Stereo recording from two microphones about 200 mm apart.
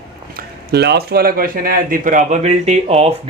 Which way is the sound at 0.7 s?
55° right (ahead or behind).